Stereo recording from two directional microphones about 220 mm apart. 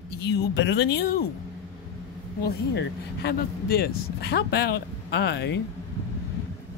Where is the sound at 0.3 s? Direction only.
50° left (ahead or behind).